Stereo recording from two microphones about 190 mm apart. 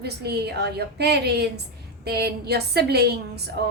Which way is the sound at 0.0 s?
55° right (ahead or behind).